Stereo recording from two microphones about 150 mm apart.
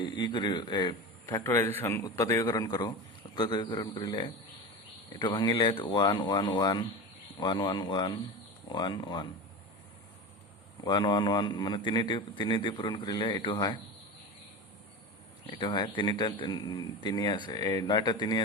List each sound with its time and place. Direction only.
0.0 s a man's voice: 30° left (ahead or behind)
1.5 s a man's voice: 15° left (ahead or behind); by 9.2 s 30° left (ahead or behind)
10.8 s speech: 30° left (ahead or behind)
15.4 s speech: 30° left (ahead or behind)